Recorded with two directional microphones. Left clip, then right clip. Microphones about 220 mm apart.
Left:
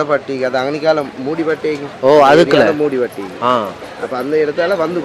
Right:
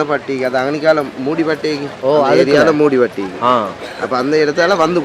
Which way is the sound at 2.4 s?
50° right (ahead or behind).